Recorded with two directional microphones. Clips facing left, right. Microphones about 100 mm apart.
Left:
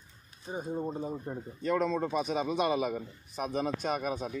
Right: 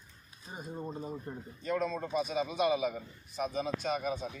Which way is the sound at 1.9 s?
65° left (ahead or behind).